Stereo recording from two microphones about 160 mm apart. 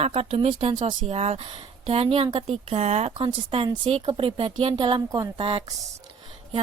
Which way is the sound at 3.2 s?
30° right (ahead or behind).